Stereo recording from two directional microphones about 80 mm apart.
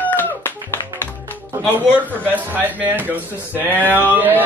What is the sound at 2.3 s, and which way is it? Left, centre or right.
Chicken, right.